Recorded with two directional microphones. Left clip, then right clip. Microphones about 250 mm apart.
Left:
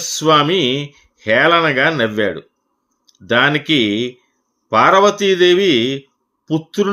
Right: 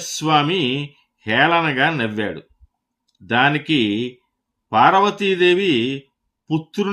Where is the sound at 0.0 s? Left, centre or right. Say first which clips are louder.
Left 5 dB; centre.